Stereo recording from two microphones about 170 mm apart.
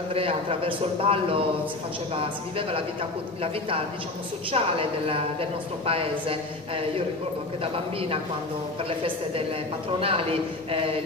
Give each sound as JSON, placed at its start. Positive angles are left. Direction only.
{"t": 0.1, "sound": "a woman's voice", "side_deg": -35}
{"t": 4.5, "sound": "a woman's voice", "side_deg": -35}
{"t": 9.9, "sound": "a woman's voice", "side_deg": -35}